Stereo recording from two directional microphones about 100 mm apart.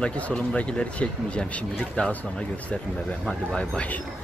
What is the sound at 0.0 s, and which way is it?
Speech, 10° left (ahead or behind).